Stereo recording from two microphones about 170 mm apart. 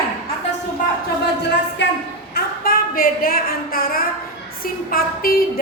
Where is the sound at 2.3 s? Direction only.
60° left (ahead or behind).